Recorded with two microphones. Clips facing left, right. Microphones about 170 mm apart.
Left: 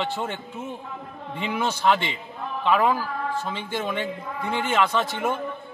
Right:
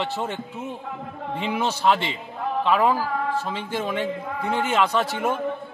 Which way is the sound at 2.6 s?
5° right (ahead or behind).